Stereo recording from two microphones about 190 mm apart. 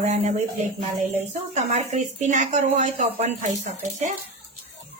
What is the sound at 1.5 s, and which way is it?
A woman's voice, 40° right (ahead or behind).